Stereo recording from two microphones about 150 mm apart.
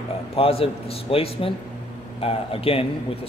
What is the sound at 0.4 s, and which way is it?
Speech, 40° left (ahead or behind).